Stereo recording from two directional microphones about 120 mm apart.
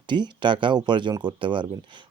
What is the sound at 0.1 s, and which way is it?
Speech, 40° right (ahead or behind).